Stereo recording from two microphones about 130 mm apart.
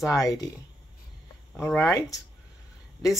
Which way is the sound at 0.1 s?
25° left (ahead or behind).